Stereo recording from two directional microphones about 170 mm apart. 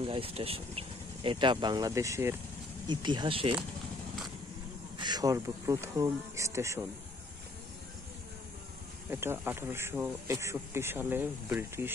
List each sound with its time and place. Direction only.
0.0 s speech: 30° right (ahead or behind)
4.9 s speech: 25° right (ahead or behind)
9.1 s speech: 15° right (ahead or behind)